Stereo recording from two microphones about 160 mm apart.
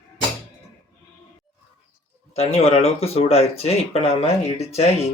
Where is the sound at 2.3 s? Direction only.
40° left (ahead or behind).